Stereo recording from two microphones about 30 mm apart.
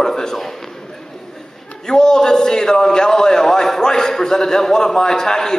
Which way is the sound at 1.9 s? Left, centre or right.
Left.